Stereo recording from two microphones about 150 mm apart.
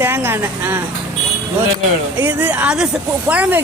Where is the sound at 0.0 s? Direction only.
15° right (ahead or behind).